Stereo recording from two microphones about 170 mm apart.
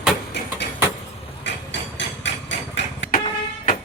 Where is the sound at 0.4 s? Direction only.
85° left.